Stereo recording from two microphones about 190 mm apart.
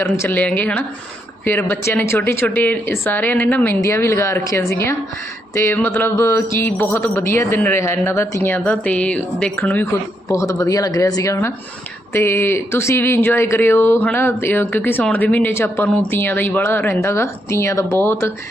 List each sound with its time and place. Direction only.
0.0 s speech: 10° left (ahead or behind)